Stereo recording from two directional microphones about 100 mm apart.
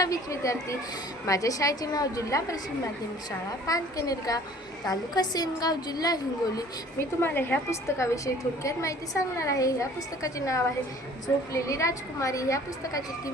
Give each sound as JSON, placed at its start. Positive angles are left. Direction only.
{"t": 0.0, "sound": "a woman's voice", "side_deg": 35}
{"t": 3.7, "sound": "a woman's voice", "side_deg": 35}
{"t": 7.2, "sound": "a woman's voice", "side_deg": 20}